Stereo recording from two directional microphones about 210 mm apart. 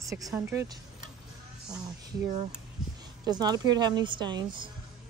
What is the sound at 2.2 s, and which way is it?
Speech, 35° right (ahead or behind).